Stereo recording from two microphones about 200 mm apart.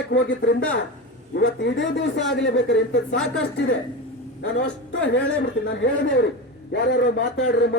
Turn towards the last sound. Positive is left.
turn(degrees=55)  # may be behind; listen again after turning